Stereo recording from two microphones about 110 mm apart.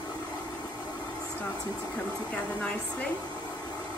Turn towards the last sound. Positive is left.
turn(degrees=10)  # may be behind; listen again after turning